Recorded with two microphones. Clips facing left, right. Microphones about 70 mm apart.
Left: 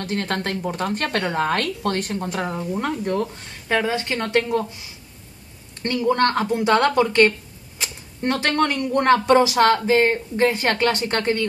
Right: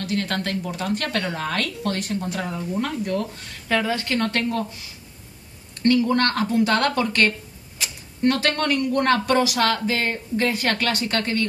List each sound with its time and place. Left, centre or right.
0.0 s speech: left
2.8 s speech: left
5.8 s speech: left